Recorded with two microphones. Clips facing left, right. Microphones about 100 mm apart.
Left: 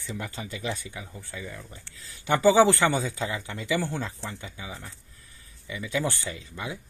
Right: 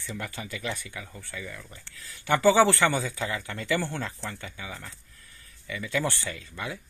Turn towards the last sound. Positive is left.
turn(degrees=20)  # may be behind; listen again after turning